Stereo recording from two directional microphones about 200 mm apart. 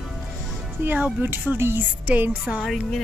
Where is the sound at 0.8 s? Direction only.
10° right (ahead or behind).